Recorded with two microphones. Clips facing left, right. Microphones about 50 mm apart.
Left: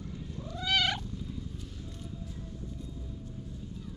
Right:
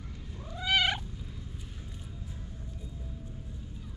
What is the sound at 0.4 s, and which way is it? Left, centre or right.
Cat, centre.